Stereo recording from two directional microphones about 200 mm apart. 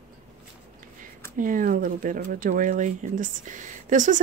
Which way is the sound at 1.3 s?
45° right (ahead or behind).